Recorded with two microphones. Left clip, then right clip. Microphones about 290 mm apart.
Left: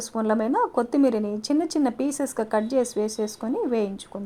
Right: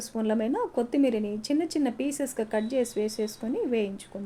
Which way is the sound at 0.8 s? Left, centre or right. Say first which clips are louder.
Left 4 dB; centre.